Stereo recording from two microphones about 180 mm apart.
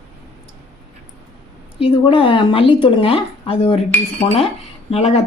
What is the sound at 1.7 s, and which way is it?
Speech, 30° left (ahead or behind).